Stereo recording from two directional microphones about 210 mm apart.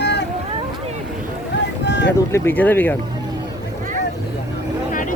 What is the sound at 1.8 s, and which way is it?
Boat, 55° left (ahead or behind).